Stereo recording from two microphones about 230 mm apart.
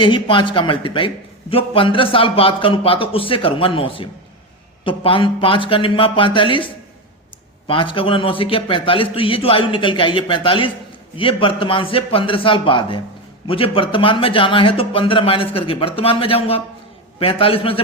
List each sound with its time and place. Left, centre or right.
0.0 s a man's voice: left
7.7 s a man's voice: left